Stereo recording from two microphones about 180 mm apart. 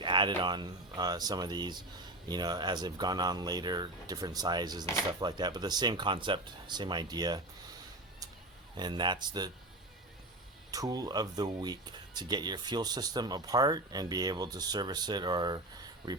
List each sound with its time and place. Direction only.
0.0 s speech: 25° right (ahead or behind)
8.7 s speech: 25° right (ahead or behind)
10.7 s speech: 20° right (ahead or behind)